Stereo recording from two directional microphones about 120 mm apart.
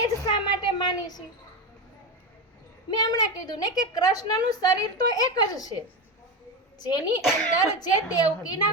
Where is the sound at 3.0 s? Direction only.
35° left (ahead or behind).